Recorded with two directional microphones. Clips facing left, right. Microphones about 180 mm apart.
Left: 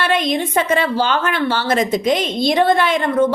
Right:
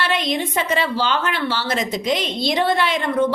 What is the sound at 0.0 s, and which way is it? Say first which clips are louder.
A woman's voice: left 4 dB; 50° left (ahead or behind).